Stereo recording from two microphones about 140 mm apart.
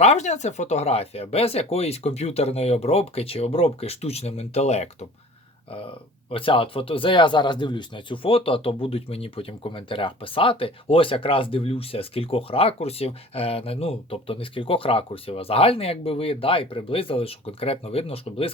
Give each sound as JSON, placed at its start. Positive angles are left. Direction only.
{"t": 0.0, "sound": "speech", "side_deg": 50}
{"t": 6.3, "sound": "speech", "side_deg": 40}